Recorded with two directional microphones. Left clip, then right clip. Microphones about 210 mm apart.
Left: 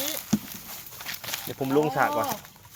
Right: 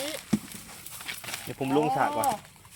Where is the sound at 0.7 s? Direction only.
35° left (ahead or behind).